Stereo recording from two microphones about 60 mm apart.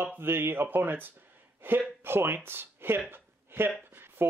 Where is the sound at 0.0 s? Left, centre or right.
Right.